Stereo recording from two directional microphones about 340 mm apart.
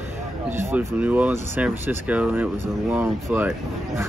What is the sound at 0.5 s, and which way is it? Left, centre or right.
Speech, centre.